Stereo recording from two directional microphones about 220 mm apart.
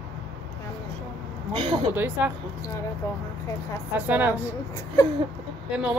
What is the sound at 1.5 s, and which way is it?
Speech, 25° right (ahead or behind).